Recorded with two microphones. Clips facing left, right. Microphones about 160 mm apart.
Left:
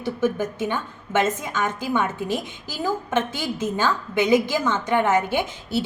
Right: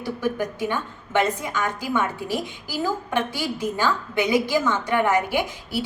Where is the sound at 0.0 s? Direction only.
20° left (ahead or behind).